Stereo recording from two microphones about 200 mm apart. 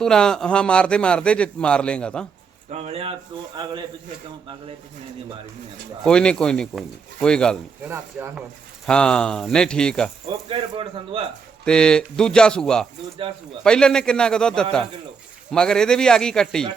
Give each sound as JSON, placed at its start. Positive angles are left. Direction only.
{"t": 0.0, "sound": "a man's voice", "side_deg": 5}
{"t": 2.6, "sound": "speech", "side_deg": -35}
{"t": 6.1, "sound": "a man's voice", "side_deg": 5}
{"t": 7.9, "sound": "speech", "side_deg": -10}
{"t": 8.9, "sound": "a man's voice", "side_deg": 5}
{"t": 10.2, "sound": "speech", "side_deg": -25}
{"t": 11.6, "sound": "a man's voice", "side_deg": 5}